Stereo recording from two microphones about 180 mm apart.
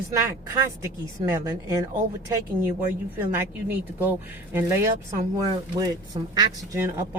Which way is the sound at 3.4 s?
10° right (ahead or behind).